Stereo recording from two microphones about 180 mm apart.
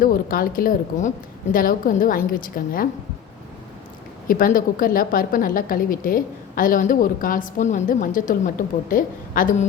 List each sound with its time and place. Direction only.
0.0 s a woman's voice: 50° left (ahead or behind)
4.3 s a woman's voice: 50° left (ahead or behind)